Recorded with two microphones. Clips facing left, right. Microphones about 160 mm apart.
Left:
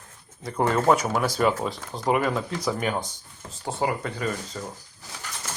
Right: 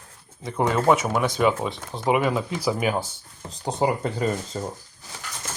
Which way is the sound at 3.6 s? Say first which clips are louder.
Right 3 dB; 20° right (ahead or behind).